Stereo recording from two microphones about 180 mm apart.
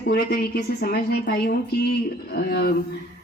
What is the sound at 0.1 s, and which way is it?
Speech, 60° left (ahead or behind).